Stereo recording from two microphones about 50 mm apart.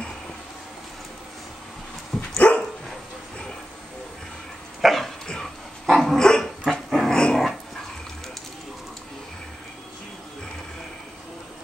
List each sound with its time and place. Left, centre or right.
2.3 s dog: left
4.8 s dog: centre